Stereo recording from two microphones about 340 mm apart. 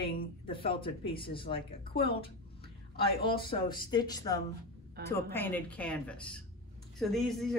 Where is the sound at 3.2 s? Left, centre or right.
Centre.